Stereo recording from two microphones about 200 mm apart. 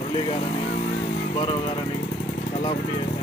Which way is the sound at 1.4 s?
25° left (ahead or behind).